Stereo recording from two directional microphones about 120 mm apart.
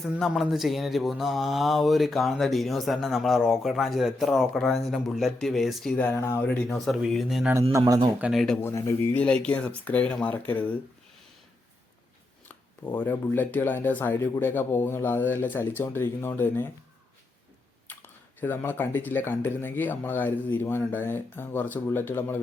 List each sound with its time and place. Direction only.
0.0 s speech: centre (ahead or behind)
6.0 s speech: 20° left (ahead or behind)
6.7 s speech: centre (ahead or behind)
7.7 s speech: 30° right (ahead or behind)
8.3 s speech: centre (ahead or behind)
8.6 s speech: 25° left (ahead or behind)
9.2 s speech: 10° left (ahead or behind)
13.0 s speech: 15° left (ahead or behind)
17.8 s speech: 15° left (ahead or behind)